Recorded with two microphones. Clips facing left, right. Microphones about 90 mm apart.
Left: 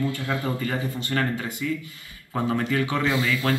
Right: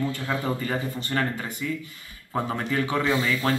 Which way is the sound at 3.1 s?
30° right (ahead or behind).